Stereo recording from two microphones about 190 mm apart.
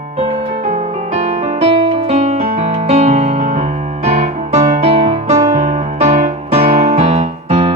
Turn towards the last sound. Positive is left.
turn(degrees=-35)  # may be behind; listen again after turning